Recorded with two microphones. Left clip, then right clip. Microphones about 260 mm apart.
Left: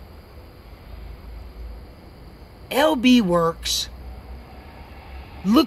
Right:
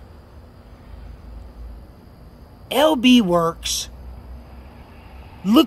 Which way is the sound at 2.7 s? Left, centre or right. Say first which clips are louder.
Right 2 dB; centre.